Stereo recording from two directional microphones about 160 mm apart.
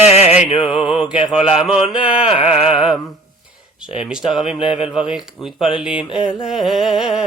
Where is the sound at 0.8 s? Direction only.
35° left (ahead or behind).